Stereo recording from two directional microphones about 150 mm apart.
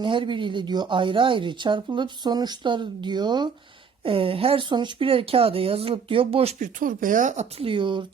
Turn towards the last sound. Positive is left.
turn(degrees=-30)  # may be behind; listen again after turning